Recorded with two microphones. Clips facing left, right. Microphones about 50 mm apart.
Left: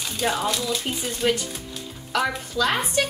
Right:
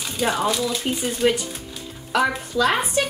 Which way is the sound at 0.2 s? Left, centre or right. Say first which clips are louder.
Right 3 dB; centre.